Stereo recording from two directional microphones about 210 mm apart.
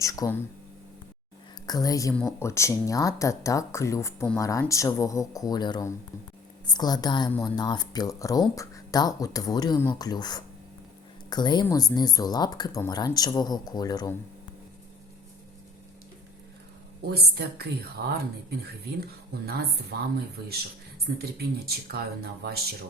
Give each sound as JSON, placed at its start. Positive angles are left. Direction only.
{"t": 0.0, "sound": "speech", "side_deg": 15}
{"t": 1.6, "sound": "speech", "side_deg": 15}
{"t": 17.2, "sound": "speech", "side_deg": -50}
{"t": 19.5, "sound": "speech", "side_deg": -50}
{"t": 21.2, "sound": "speech", "side_deg": -50}